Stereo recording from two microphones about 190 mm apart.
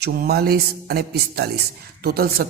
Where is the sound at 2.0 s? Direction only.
55° right (ahead or behind).